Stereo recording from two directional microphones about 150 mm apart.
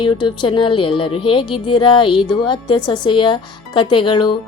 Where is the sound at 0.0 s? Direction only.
35° left (ahead or behind).